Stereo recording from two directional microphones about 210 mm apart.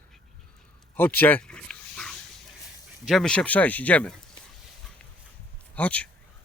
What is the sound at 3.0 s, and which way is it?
Speech, centre (ahead or behind).